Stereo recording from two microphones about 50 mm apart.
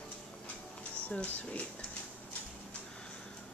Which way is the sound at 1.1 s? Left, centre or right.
Left.